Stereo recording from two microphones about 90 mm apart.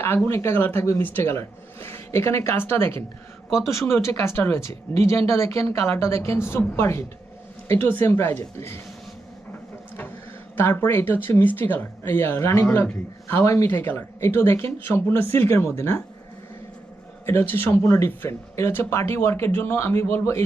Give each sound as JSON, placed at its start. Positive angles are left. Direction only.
{"t": 0.3, "sound": "speech", "side_deg": 30}
{"t": 10.6, "sound": "speech", "side_deg": 25}
{"t": 17.2, "sound": "speech", "side_deg": 25}